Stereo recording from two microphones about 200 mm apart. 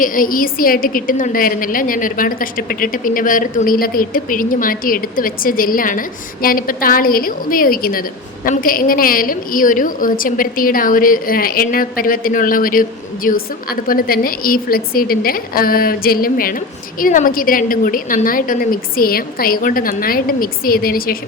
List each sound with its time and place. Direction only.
0.0 s a woman's voice: 45° left (ahead or behind)